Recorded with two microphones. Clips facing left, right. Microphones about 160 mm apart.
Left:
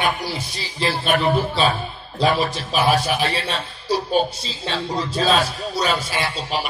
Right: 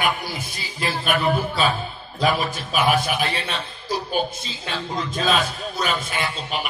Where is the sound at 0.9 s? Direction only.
30° left (ahead or behind).